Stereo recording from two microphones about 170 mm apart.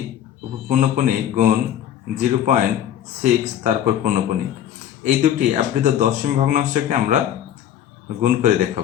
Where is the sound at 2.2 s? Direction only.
45° right (ahead or behind).